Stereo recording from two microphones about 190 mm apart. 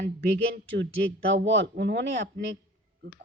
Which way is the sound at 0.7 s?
70° right (ahead or behind).